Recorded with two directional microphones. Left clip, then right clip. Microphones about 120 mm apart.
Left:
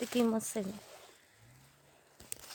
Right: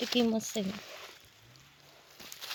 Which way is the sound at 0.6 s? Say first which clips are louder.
Right 3 dB; 45° left (ahead or behind).